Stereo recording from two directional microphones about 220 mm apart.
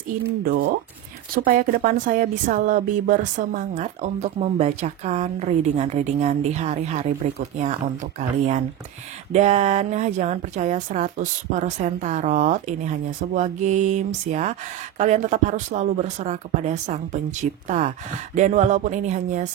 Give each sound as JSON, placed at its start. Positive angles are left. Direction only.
{"t": 1.3, "sound": "a woman's voice", "side_deg": -40}